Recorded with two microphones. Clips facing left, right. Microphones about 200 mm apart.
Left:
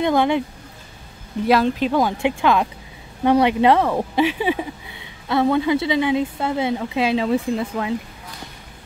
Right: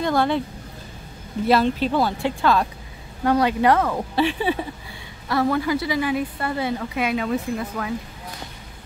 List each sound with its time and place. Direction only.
0.0 s speech: 15° left (ahead or behind)
1.5 s a woman's voice: 10° left (ahead or behind)